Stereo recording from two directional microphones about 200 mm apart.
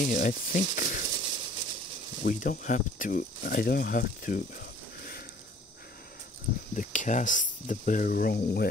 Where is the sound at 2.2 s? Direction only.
45° left (ahead or behind).